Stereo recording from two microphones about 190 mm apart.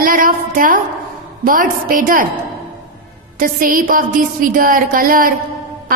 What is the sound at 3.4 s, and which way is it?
A woman's voice, 45° right (ahead or behind).